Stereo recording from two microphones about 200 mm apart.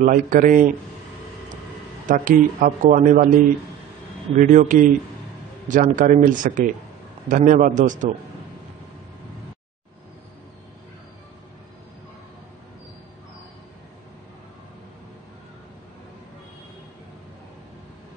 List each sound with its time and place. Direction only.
0.0 s speech: 40° right (ahead or behind)
2.0 s speech: 40° right (ahead or behind)
4.4 s speech: 40° right (ahead or behind)